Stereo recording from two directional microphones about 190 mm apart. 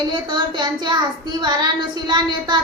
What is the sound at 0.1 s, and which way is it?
A woman's voice, 25° right (ahead or behind).